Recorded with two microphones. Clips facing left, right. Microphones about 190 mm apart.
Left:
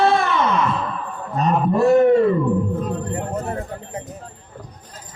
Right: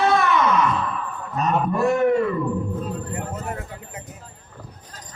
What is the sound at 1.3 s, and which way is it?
A man's voice, 30° left (ahead or behind).